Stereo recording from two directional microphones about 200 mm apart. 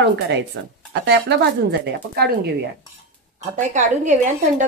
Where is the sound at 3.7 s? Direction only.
35° right (ahead or behind).